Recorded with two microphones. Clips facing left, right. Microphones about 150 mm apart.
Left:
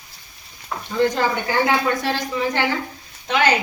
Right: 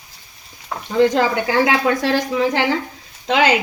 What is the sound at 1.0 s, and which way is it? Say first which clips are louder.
A woman's voice: right 4 dB; 90° right.